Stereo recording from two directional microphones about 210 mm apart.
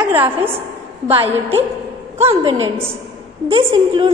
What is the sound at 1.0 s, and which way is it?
A woman's voice, 30° right (ahead or behind).